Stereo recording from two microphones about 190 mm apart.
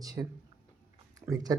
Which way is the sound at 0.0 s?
20° right (ahead or behind).